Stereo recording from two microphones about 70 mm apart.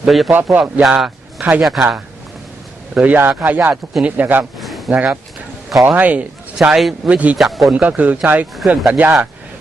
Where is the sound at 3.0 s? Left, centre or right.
Right.